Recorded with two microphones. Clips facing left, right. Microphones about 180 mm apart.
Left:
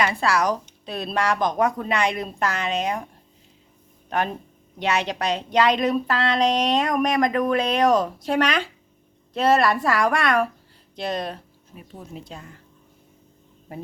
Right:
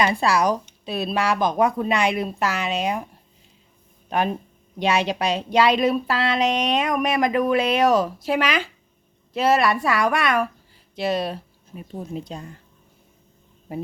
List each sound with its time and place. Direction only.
0.0 s speech: 15° right (ahead or behind)
4.8 s a woman's voice: 10° right (ahead or behind)
11.7 s speech: 25° right (ahead or behind)